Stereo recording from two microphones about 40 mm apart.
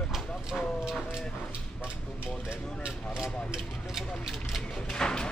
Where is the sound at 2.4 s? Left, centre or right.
Right.